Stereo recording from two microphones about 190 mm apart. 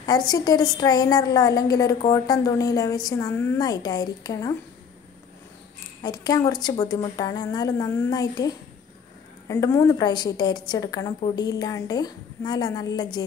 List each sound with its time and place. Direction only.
0.0 s a woman's voice: 20° left (ahead or behind)
6.0 s a woman's voice: 20° left (ahead or behind)